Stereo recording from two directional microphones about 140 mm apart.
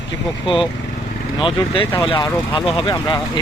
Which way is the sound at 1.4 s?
40° left (ahead or behind).